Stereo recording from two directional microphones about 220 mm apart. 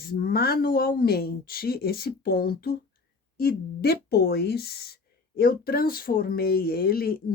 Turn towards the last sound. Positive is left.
turn(degrees=45)  # may be behind; listen again after turning